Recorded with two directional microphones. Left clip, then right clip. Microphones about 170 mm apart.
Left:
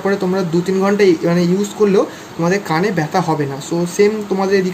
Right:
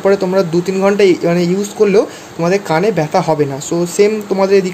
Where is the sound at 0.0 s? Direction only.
30° right (ahead or behind).